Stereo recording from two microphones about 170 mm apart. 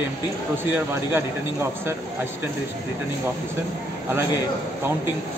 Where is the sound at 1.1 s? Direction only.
15° right (ahead or behind).